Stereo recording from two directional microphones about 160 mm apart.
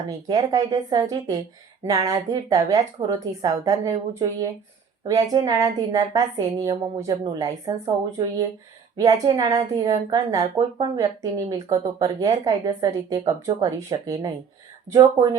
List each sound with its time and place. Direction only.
0.3 s speech: 20° right (ahead or behind)